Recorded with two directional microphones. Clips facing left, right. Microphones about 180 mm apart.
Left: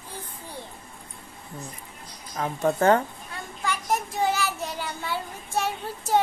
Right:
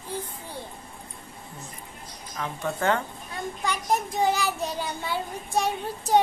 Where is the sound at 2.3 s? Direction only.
40° left (ahead or behind).